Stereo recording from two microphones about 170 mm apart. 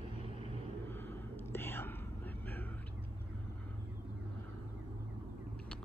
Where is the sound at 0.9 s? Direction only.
15° left (ahead or behind).